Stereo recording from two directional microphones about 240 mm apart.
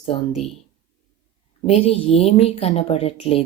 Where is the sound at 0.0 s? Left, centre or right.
Left.